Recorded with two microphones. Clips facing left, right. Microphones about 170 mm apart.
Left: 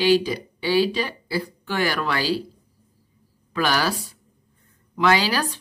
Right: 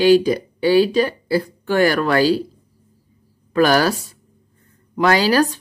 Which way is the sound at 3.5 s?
45° right (ahead or behind).